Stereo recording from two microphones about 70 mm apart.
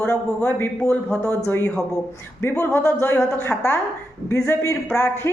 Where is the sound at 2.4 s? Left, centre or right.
Left.